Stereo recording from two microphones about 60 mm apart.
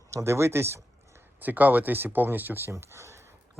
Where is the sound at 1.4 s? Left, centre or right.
Right.